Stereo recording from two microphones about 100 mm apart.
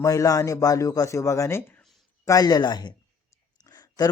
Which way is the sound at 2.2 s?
40° left (ahead or behind).